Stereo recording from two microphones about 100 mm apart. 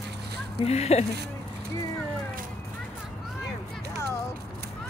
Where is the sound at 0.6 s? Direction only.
90° left.